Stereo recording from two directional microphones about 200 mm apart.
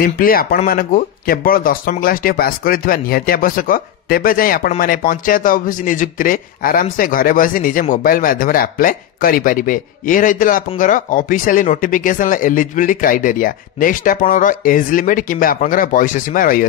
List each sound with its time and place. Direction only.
0.0 s speech: 45° left (ahead or behind)